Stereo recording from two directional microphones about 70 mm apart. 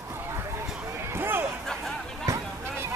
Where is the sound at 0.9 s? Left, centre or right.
Right.